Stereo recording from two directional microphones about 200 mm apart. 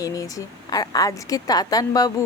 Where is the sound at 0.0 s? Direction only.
15° left (ahead or behind).